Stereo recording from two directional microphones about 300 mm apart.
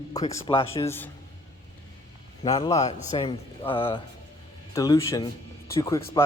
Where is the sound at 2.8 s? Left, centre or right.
Left.